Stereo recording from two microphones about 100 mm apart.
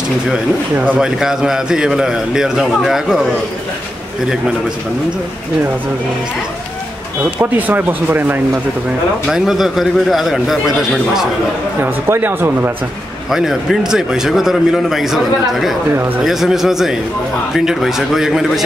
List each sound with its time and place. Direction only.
0.7 s a man's voice: 10° right (ahead or behind)
7.3 s speech: 15° right (ahead or behind)
9.3 s a man's voice: centre (ahead or behind)
11.8 s speech: 20° right (ahead or behind)
13.3 s a man's voice: 5° right (ahead or behind)
16.2 s a man's voice: 5° right (ahead or behind)